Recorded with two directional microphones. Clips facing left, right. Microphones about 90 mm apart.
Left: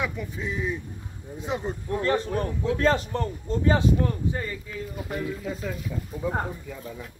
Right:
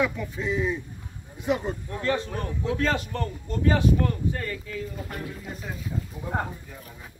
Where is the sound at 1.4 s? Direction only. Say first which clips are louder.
Right 4 dB; 30° left (ahead or behind).